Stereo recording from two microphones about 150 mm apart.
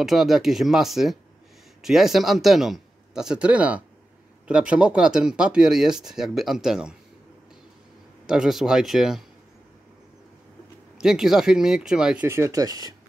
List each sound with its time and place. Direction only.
0.0 s speech: centre (ahead or behind)
8.3 s speech: 5° right (ahead or behind)
11.0 s speech: 5° right (ahead or behind)
12.3 s speech: 20° right (ahead or behind)